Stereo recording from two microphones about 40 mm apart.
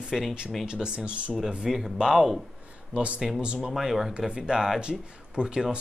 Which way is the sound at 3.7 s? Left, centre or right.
Centre.